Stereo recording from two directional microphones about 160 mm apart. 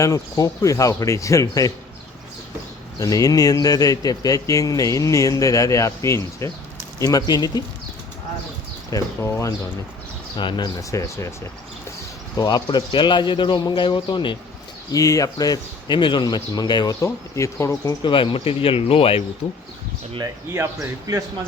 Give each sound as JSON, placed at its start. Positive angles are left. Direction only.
{"t": 0.0, "sound": "speech", "side_deg": 20}
{"t": 3.0, "sound": "speech", "side_deg": 20}
{"t": 8.9, "sound": "speech", "side_deg": 20}
{"t": 12.4, "sound": "speech", "side_deg": 25}
{"t": 18.0, "sound": "speech", "side_deg": 30}
{"t": 20.1, "sound": "speech", "side_deg": -20}